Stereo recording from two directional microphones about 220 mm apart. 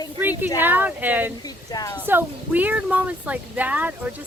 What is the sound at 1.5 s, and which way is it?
Speech, 15° left (ahead or behind).